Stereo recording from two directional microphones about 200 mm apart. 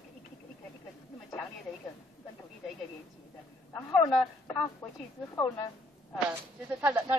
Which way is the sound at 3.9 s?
10° left (ahead or behind).